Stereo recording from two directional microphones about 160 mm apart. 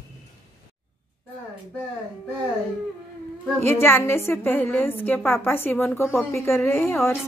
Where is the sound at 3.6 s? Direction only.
15° left (ahead or behind).